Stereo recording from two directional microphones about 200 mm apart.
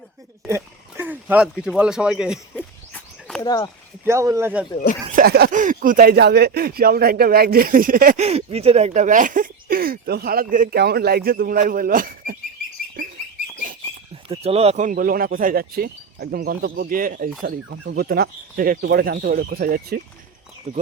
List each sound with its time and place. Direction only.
0.4 s speech: 15° right (ahead or behind)
3.4 s speech: 20° left (ahead or behind)
4.0 s speech: 15° right (ahead or behind)
5.1 s speech: 50° right (ahead or behind)
8.2 s speech: 30° right (ahead or behind)
14.3 s speech: 30° right (ahead or behind); by 20.0 s 45° right (ahead or behind)
20.7 s speech: 35° right (ahead or behind)